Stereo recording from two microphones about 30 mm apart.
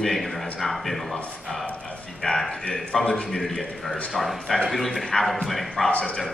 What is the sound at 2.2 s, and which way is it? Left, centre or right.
Speech, centre.